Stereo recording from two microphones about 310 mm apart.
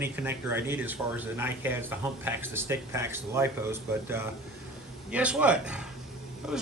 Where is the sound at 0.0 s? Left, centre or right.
Centre.